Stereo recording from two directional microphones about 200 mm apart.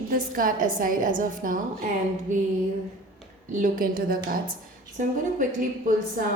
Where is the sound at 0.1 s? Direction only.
45° right (ahead or behind).